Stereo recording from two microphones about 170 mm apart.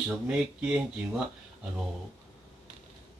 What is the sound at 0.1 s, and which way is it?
Speech, 5° right (ahead or behind).